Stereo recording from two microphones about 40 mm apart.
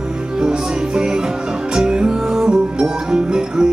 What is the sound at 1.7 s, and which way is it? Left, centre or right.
Music, right.